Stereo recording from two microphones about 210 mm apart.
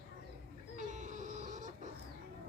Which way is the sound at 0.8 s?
35° right (ahead or behind).